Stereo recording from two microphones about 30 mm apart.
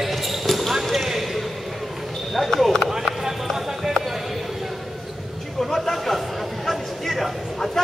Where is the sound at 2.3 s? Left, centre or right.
Centre.